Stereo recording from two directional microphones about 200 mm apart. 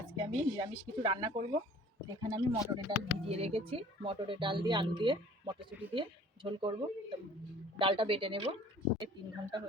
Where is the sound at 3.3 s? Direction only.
30° right (ahead or behind).